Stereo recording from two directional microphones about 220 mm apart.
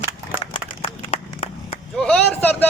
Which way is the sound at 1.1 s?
25° left (ahead or behind).